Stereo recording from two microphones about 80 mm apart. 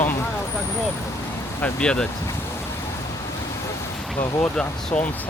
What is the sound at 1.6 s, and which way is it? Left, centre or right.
Speech, centre.